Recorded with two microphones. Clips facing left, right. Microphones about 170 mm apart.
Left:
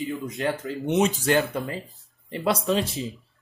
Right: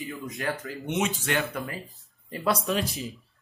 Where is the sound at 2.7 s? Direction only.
25° left (ahead or behind).